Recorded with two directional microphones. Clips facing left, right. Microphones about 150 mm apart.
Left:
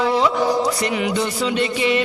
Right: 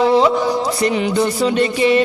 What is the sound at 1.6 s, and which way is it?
Mantra, 35° right (ahead or behind).